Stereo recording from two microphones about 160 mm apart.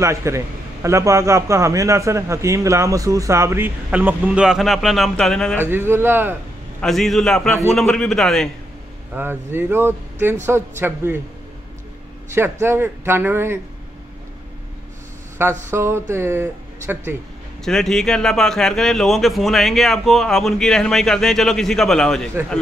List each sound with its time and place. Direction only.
0.0 s a man's voice: 20° right (ahead or behind); by 5.6 s 5° left (ahead or behind)
5.6 s a man's voice: 15° right (ahead or behind)
6.8 s a man's voice: centre (ahead or behind)
9.1 s a man's voice: 15° right (ahead or behind)
12.4 s a man's voice: 15° right (ahead or behind)
15.4 s a man's voice: 15° right (ahead or behind)
17.6 s a man's voice: 5° left (ahead or behind)